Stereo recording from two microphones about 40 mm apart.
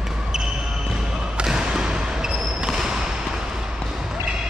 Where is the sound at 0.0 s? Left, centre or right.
Centre.